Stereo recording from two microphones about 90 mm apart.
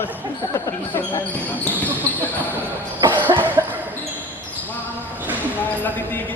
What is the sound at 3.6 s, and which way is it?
Basketball bounce, 40° right (ahead or behind).